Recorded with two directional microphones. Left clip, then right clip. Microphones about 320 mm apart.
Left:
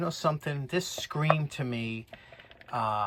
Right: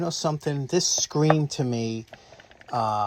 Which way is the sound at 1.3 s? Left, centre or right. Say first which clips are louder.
Right 8 dB; centre.